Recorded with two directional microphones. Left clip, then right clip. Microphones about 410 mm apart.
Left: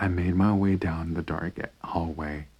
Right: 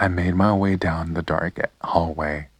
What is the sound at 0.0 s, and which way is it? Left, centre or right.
Speech, centre.